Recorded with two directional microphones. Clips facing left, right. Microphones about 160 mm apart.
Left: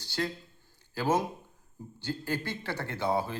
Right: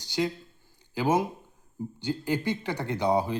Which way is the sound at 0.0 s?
15° right (ahead or behind).